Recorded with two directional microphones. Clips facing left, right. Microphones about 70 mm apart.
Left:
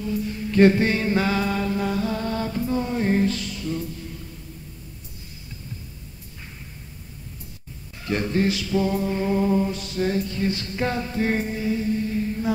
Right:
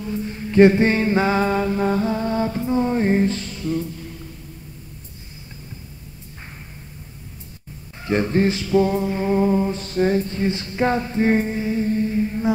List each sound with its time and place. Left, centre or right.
0.3 s mantra: right
8.0 s mantra: right
9.8 s a sound: right